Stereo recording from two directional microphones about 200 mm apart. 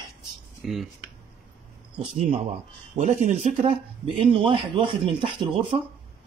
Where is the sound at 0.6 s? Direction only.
Centre (ahead or behind).